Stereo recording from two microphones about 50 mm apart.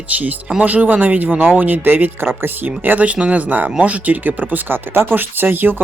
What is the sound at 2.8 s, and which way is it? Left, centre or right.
Speech, right.